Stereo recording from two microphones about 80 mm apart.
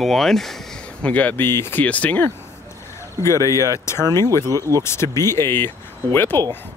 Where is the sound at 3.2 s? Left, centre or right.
Left.